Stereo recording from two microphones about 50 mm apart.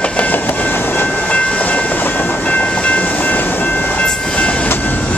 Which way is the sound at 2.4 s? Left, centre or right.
Left.